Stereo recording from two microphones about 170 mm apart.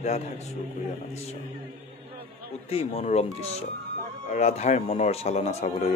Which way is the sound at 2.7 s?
40° left (ahead or behind).